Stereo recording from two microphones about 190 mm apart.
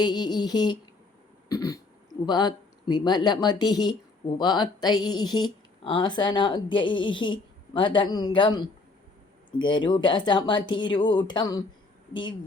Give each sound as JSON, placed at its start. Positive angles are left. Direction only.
{"t": 0.0, "sound": "speech", "side_deg": 20}
{"t": 1.5, "sound": "throat clearing", "side_deg": 20}
{"t": 2.2, "sound": "speech", "side_deg": 25}